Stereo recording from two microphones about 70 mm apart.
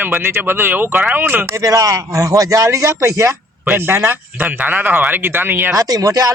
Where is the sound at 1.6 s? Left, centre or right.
Right.